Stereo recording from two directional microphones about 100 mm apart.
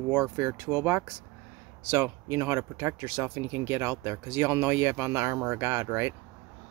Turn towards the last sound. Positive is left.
turn(degrees=-25)  # may be behind; listen again after turning